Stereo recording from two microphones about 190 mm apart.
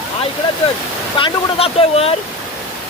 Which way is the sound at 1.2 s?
30° left (ahead or behind).